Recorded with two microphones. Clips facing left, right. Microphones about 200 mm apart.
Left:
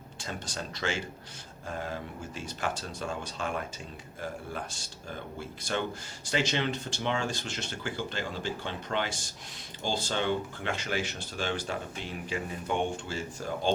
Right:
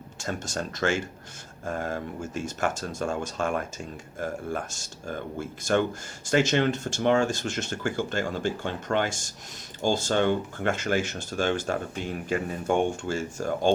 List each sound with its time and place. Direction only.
0.2 s speech: 45° right (ahead or behind)